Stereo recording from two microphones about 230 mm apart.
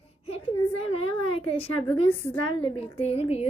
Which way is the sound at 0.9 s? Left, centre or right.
Left.